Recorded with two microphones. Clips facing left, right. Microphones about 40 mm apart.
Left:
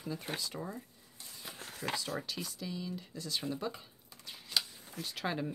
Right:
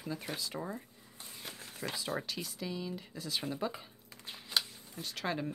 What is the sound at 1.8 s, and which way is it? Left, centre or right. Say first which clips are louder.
Speech: left 3 dB; right.